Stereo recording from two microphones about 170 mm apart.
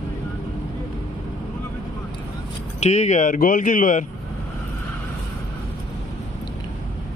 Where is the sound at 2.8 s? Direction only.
40° left (ahead or behind).